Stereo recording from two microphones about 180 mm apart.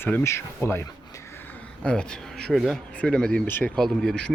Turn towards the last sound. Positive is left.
turn(degrees=5)  # may be behind; listen again after turning